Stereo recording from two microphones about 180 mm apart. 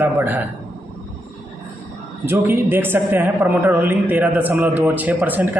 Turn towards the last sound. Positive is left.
turn(degrees=-10)  # may be behind; listen again after turning